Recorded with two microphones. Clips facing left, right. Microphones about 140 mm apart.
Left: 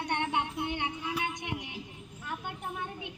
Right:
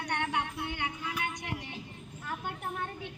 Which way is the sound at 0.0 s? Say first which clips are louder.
Left 2 dB; 25° left (ahead or behind).